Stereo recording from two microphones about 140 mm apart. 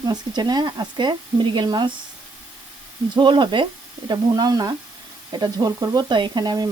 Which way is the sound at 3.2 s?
35° right (ahead or behind).